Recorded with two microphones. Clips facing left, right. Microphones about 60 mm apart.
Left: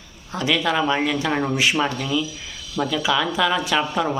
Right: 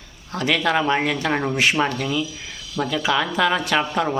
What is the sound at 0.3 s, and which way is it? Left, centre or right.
Speech, right.